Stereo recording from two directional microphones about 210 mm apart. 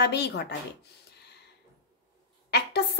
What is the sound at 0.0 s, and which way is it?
Speech, 50° left (ahead or behind).